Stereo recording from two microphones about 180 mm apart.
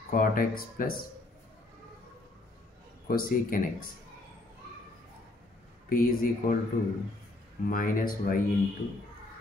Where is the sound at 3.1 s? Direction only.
50° left (ahead or behind).